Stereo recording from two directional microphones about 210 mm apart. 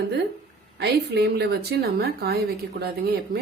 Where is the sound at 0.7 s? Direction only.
50° right (ahead or behind).